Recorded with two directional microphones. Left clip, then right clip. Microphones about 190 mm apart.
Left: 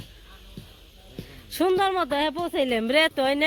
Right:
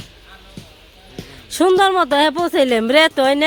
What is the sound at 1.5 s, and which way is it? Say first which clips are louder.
Speech: right 9 dB; 15° right (ahead or behind).